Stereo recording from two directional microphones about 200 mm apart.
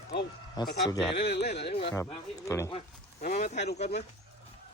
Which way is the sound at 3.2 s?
35° left (ahead or behind).